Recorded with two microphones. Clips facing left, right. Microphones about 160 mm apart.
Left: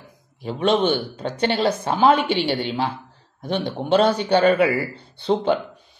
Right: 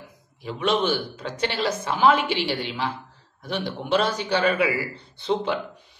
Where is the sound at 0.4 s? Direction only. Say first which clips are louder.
Left 4 dB; 30° left (ahead or behind).